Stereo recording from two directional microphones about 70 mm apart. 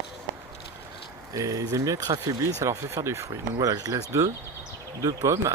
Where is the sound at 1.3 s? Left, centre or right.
Right.